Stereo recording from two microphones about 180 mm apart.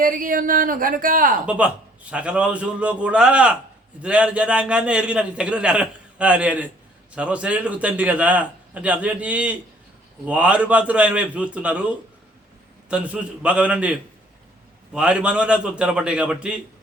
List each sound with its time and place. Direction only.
0.0 s speech: 50° right (ahead or behind)
1.5 s a man's voice: 5° right (ahead or behind)